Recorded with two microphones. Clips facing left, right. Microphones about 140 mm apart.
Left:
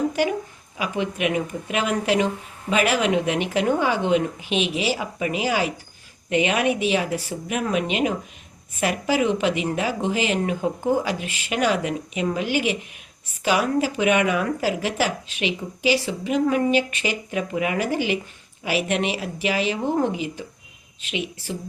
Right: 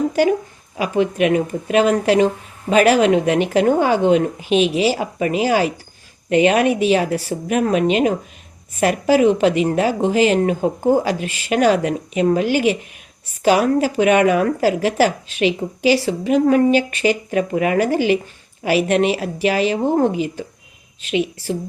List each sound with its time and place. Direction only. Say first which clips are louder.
0.8 s speech: right 7 dB; 45° right (ahead or behind)